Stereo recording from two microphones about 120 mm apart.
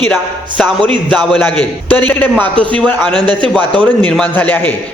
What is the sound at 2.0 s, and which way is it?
Speech, 15° left (ahead or behind).